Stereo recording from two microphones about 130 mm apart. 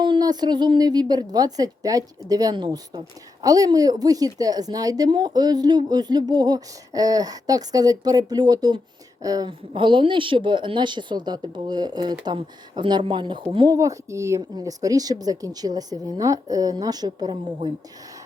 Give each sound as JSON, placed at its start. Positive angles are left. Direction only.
{"t": 0.0, "sound": "a woman's voice", "side_deg": -35}
{"t": 9.5, "sound": "a woman's voice", "side_deg": -40}
{"t": 13.7, "sound": "a woman's voice", "side_deg": -25}